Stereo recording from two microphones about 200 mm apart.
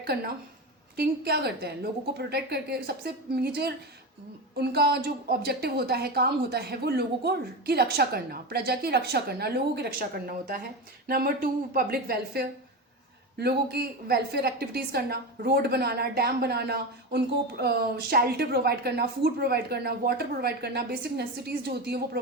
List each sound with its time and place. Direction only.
0.1 s a woman's voice: 50° right (ahead or behind)